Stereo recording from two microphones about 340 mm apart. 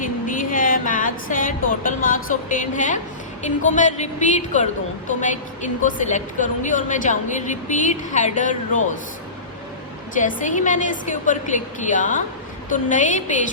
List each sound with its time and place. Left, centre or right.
0.3 s music: left
3.4 s a woman's voice: left
10.2 s a woman's voice: left